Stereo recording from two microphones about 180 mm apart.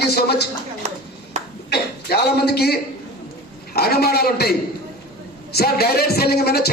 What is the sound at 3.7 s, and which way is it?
Speech, 60° left (ahead or behind).